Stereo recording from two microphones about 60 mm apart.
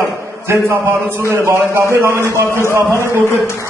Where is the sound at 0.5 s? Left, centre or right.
Right.